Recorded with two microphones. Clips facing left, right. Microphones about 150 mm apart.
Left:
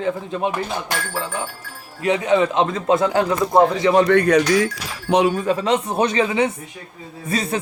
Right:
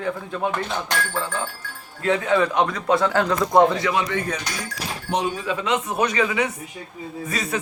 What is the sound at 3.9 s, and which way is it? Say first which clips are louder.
Speech: left 11 dB; 60° left (ahead or behind).